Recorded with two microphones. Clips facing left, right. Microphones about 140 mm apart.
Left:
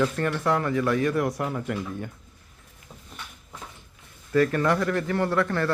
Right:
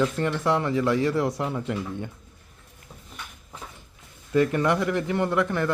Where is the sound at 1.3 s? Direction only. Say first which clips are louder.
Right 1 dB; centre (ahead or behind).